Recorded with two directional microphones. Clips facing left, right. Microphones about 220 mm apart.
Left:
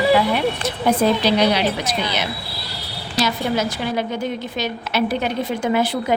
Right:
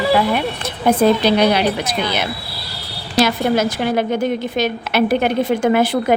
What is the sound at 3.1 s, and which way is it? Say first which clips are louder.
A woman's voice: right 5 dB; 50° right (ahead or behind).